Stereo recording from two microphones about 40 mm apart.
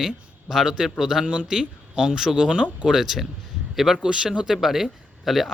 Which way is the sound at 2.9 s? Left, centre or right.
Centre.